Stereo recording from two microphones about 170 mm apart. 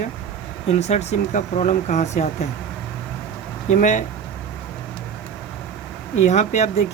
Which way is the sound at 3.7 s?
45° left (ahead or behind).